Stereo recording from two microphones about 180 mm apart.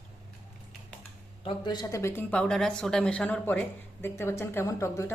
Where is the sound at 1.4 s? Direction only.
25° left (ahead or behind).